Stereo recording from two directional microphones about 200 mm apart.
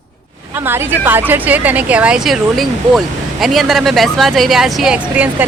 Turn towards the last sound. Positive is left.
turn(degrees=-5)  # may be behind; listen again after turning